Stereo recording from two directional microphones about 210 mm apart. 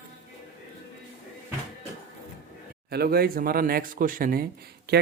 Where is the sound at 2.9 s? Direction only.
45° right (ahead or behind).